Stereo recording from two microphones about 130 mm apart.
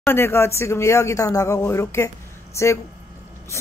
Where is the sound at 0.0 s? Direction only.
15° left (ahead or behind).